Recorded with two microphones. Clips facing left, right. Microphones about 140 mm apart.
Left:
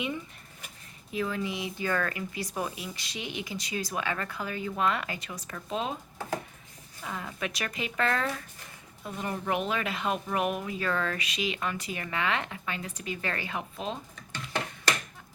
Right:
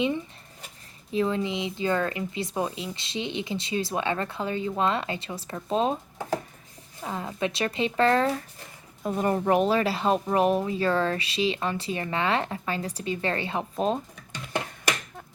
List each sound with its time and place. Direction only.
1.1 s speech: 25° right (ahead or behind)
7.0 s speech: 30° right (ahead or behind)
9.0 s speech: 45° right (ahead or behind)
14.3 s finger snapping: 15° right (ahead or behind)